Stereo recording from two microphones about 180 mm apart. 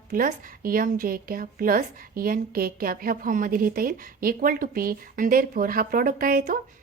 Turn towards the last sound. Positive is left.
turn(degrees=-50)  # may be behind; listen again after turning